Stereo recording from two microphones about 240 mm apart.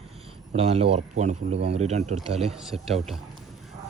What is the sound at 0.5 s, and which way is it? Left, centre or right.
Speech, right.